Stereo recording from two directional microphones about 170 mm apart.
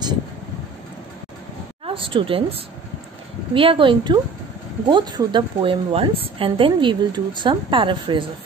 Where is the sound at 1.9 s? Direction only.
30° right (ahead or behind).